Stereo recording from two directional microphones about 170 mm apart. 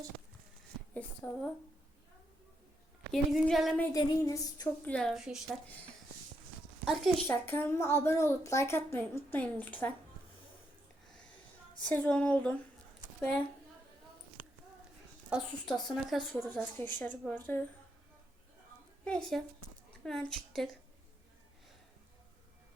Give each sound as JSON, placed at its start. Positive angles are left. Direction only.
{"t": 0.9, "sound": "a woman's voice", "side_deg": 10}
{"t": 3.1, "sound": "speech", "side_deg": 0}
{"t": 3.9, "sound": "female singing", "side_deg": 20}
{"t": 4.9, "sound": "speech", "side_deg": 5}
{"t": 6.8, "sound": "a woman's voice", "side_deg": 0}
{"t": 7.3, "sound": "a woman's voice", "side_deg": 10}
{"t": 11.9, "sound": "a woman's voice", "side_deg": 10}
{"t": 15.3, "sound": "speech", "side_deg": 0}
{"t": 16.6, "sound": "a woman's voice", "side_deg": 10}
{"t": 19.0, "sound": "speech", "side_deg": 5}